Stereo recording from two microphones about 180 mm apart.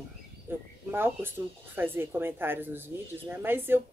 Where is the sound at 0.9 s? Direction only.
10° right (ahead or behind).